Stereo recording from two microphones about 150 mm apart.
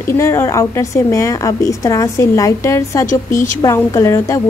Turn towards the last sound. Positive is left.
turn(degrees=20)  # may be behind; listen again after turning